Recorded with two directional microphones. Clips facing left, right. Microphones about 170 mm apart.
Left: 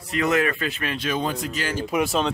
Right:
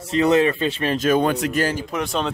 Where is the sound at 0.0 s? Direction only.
30° right (ahead or behind).